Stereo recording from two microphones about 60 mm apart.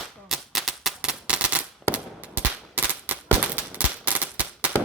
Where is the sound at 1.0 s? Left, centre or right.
Centre.